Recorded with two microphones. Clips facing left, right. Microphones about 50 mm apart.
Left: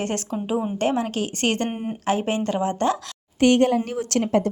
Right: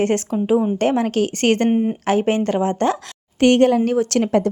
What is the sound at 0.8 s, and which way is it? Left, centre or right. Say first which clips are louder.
Speech: right 5 dB; right.